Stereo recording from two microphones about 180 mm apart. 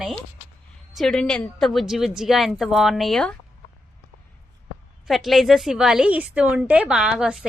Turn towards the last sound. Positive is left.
turn(degrees=-5)  # may be behind; listen again after turning